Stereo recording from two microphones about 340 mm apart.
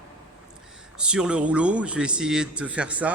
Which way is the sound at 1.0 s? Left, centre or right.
Centre.